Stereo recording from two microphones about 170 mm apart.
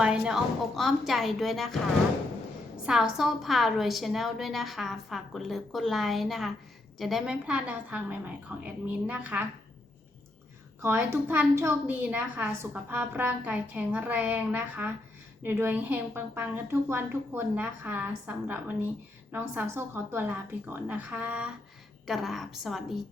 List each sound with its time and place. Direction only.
0.0 s a woman's voice: 5° right (ahead or behind)
2.8 s a woman's voice: centre (ahead or behind)
10.8 s a woman's voice: 15° right (ahead or behind)